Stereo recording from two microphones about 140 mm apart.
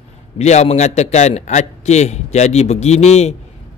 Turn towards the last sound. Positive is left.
turn(degrees=50)  # may be behind; listen again after turning